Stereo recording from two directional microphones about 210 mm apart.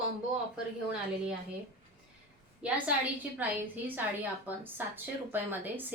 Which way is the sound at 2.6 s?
5° right (ahead or behind).